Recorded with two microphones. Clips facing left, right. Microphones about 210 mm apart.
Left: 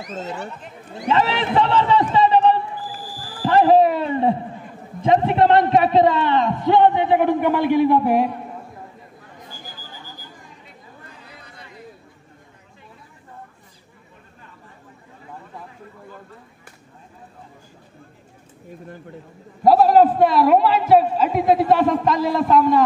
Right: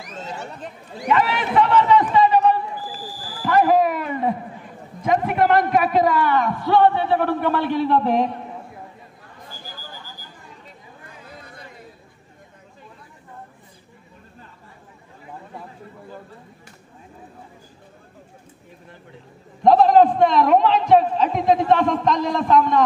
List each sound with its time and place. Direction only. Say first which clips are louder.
0.9 s speech: left 1 dB; 25° left (ahead or behind)
3.0 s a sound: left 3 dB; 30° left (ahead or behind)
5.0 s a man's voice: left 3 dB; 30° left (ahead or behind); by 8.4 s 10° left (ahead or behind)
19.6 s a man's voice: even; 5° left (ahead or behind)